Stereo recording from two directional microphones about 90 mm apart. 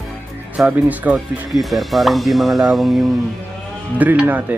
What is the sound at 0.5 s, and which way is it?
Speech, 15° right (ahead or behind).